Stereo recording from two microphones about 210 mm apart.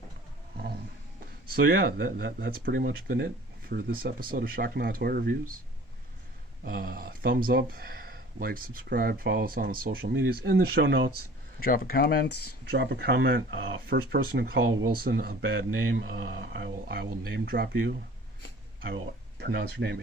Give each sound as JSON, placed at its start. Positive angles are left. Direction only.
{"t": 0.5, "sound": "a sound", "side_deg": -45}
{"t": 1.5, "sound": "speech", "side_deg": -45}
{"t": 6.7, "sound": "speech", "side_deg": -45}
{"t": 11.6, "sound": "speech", "side_deg": 45}
{"t": 12.6, "sound": "speech", "side_deg": -50}
{"t": 19.4, "sound": "speech", "side_deg": -50}